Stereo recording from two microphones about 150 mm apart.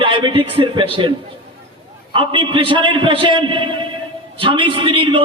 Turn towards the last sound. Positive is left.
turn(degrees=-35)  # may be behind; listen again after turning